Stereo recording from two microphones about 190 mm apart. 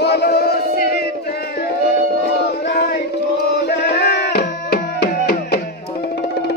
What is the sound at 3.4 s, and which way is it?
Music, 60° left (ahead or behind).